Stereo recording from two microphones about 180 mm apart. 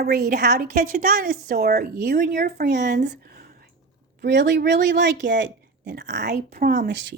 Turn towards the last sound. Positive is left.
turn(degrees=-70)  # may be behind; listen again after turning